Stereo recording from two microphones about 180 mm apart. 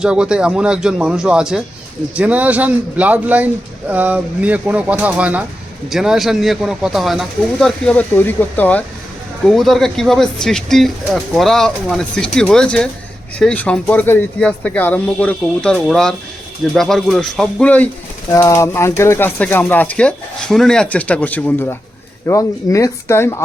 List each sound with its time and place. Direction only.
0.0 s speech: 5° right (ahead or behind); by 23.4 s 15° left (ahead or behind)